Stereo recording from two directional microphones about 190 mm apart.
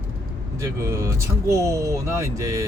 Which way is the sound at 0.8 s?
15° right (ahead or behind).